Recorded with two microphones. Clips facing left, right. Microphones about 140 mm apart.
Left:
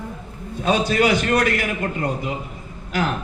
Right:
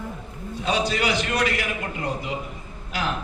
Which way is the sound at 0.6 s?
50° left (ahead or behind).